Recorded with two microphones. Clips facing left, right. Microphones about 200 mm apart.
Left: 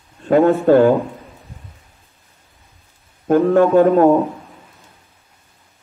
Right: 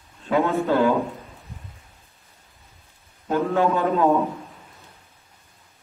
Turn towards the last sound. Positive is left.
turn(degrees=55)  # may be behind; listen again after turning